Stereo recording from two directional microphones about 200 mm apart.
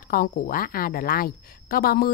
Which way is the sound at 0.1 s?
45° left (ahead or behind).